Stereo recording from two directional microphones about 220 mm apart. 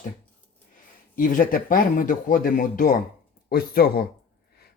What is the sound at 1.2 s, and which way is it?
Speech, 40° left (ahead or behind).